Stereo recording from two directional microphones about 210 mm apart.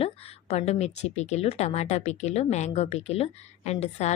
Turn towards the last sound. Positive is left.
turn(degrees=30)  # may be behind; listen again after turning